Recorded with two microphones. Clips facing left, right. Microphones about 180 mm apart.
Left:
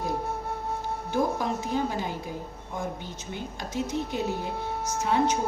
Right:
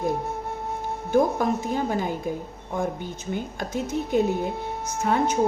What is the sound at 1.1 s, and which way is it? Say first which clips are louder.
A woman's voice: right 6 dB; 50° right (ahead or behind).